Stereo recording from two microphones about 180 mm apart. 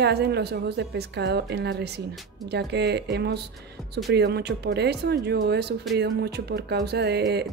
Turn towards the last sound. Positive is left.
turn(degrees=-65)  # may be behind; listen again after turning